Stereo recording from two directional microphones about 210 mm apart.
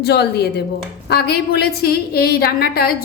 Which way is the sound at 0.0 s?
50° left (ahead or behind).